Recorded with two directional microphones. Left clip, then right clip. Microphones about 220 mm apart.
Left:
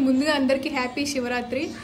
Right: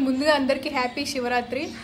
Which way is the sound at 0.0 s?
5° left (ahead or behind).